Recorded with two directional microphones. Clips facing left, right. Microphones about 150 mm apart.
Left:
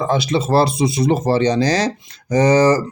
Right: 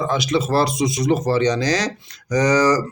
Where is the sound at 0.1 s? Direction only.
30° left (ahead or behind).